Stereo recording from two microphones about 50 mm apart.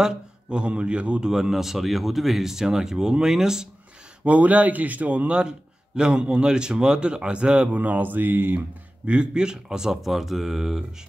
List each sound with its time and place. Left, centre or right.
0.0 s a man's voice: centre
1.3 s speech: centre
4.2 s a man's voice: right
8.5 s speech: right; by 10.8 s centre